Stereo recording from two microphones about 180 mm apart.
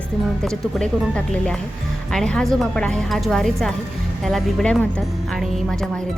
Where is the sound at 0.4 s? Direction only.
5° left (ahead or behind).